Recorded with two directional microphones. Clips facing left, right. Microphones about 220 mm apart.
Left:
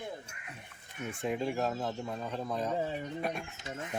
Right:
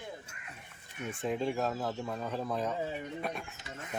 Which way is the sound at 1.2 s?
5° left (ahead or behind).